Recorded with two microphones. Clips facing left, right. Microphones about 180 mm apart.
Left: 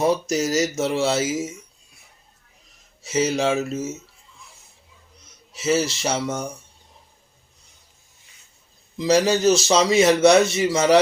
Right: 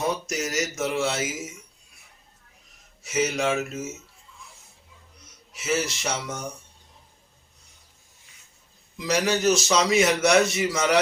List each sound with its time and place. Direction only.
0.0 s speech: 30° left (ahead or behind)
3.0 s a man's voice: 30° left (ahead or behind)
5.5 s a man's voice: 30° left (ahead or behind)
9.0 s a man's voice: 30° left (ahead or behind)